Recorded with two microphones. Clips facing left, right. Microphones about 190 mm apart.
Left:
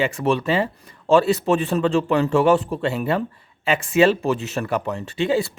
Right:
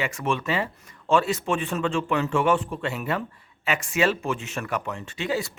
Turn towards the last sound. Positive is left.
turn(degrees=30)  # may be behind; listen again after turning